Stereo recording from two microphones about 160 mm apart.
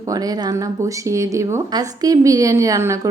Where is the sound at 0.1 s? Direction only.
25° right (ahead or behind).